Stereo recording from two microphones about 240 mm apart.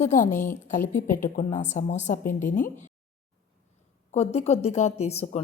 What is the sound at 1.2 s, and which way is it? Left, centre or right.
A woman's voice, left.